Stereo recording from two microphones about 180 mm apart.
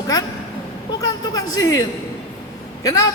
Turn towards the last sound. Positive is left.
turn(degrees=20)  # may be behind; listen again after turning